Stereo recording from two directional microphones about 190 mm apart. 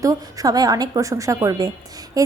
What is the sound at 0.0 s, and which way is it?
A woman's voice, 20° right (ahead or behind).